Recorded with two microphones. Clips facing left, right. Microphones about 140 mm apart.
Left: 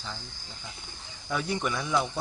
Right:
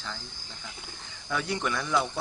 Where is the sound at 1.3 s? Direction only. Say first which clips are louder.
Even; 20° left (ahead or behind).